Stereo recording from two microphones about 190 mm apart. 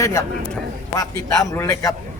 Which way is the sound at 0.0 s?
15° left (ahead or behind).